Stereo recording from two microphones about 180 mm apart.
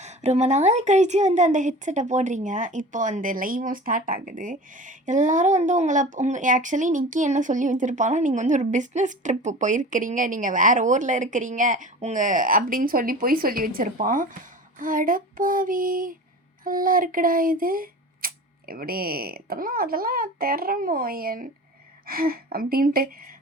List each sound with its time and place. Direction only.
0.0 s a woman's voice: 40° right (ahead or behind)